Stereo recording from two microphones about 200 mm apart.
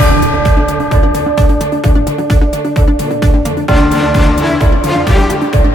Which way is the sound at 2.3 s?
Centre (ahead or behind).